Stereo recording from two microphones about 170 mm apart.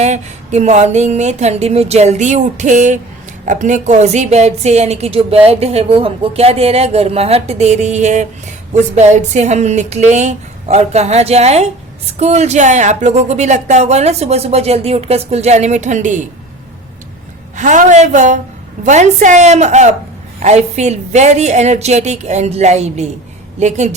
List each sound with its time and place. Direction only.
0.0 s a woman's voice: 40° right (ahead or behind)
17.6 s a woman's voice: 45° right (ahead or behind)